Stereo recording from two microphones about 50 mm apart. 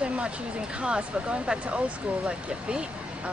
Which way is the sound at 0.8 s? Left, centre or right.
Centre.